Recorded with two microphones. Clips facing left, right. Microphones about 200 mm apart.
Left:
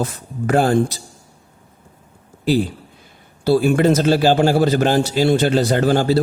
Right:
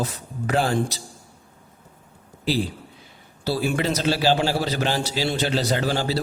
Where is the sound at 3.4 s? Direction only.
50° left (ahead or behind).